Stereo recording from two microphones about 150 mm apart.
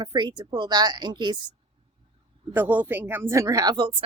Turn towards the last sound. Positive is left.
turn(degrees=-30)  # may be behind; listen again after turning